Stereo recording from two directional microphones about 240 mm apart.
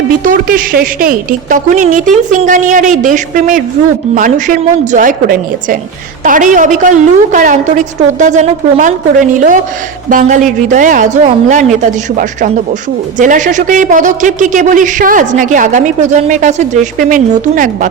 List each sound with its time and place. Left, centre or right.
0.3 s speech: right